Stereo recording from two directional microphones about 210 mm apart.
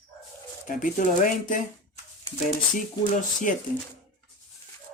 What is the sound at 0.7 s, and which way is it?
Speech, 40° left (ahead or behind).